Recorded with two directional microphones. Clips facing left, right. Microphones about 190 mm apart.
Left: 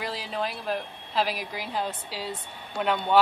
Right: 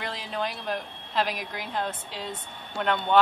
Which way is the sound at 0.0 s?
5° left (ahead or behind).